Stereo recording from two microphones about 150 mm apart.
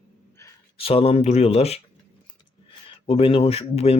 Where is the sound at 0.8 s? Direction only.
40° left (ahead or behind).